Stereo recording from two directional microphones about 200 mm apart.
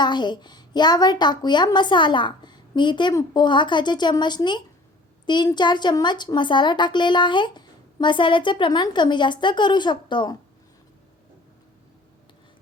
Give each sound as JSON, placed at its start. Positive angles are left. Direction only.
{"t": 0.0, "sound": "speech", "side_deg": 20}